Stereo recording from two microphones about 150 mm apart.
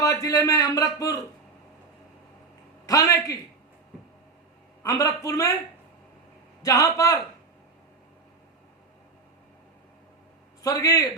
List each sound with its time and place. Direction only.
0.0 s a man's voice: 20° left (ahead or behind)
2.8 s a man's voice: 20° left (ahead or behind)
4.8 s a man's voice: 25° left (ahead or behind)
6.6 s a man's voice: 25° left (ahead or behind)
10.6 s a man's voice: 25° left (ahead or behind)